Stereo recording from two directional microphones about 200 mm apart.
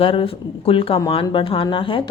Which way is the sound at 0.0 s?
25° left (ahead or behind).